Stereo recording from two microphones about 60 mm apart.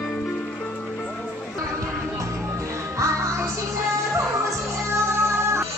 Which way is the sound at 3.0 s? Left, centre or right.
Right.